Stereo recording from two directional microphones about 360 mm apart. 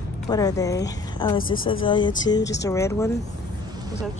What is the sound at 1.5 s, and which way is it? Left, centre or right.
Speech, left.